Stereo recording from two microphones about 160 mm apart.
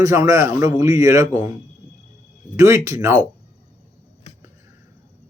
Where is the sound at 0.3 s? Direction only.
20° right (ahead or behind).